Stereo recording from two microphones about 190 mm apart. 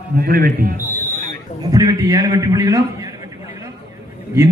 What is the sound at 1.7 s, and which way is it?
A man's voice, 20° right (ahead or behind).